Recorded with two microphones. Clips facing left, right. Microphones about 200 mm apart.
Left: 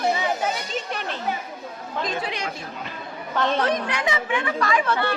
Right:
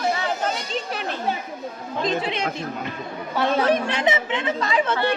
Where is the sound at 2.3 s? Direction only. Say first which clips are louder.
Right 4 dB; 25° right (ahead or behind).